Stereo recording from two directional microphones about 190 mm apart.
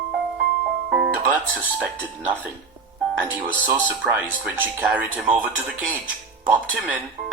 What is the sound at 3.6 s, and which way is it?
Speech, 10° right (ahead or behind).